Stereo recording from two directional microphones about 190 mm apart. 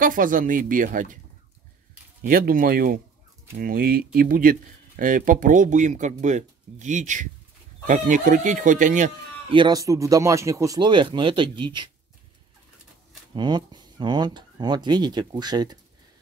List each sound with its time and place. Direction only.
0.0 s speech: 45° right (ahead or behind)
2.2 s speech: 50° right (ahead or behind)
9.5 s speech: 25° right (ahead or behind)
13.3 s speech: 25° right (ahead or behind)